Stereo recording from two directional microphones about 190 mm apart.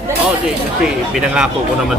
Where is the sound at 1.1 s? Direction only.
5° right (ahead or behind).